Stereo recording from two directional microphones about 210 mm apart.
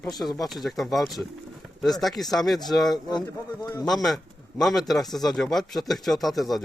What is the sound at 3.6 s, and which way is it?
Speech, 15° left (ahead or behind).